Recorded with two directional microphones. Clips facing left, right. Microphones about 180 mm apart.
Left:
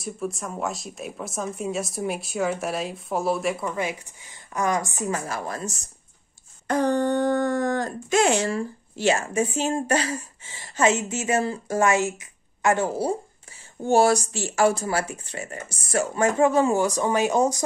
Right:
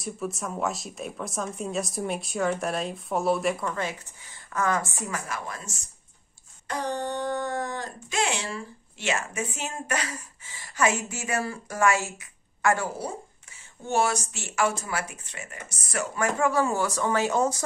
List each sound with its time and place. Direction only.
0.0 s speech: centre (ahead or behind); by 5.9 s 40° left (ahead or behind)
6.7 s speech: 50° left (ahead or behind); by 17.6 s 15° left (ahead or behind)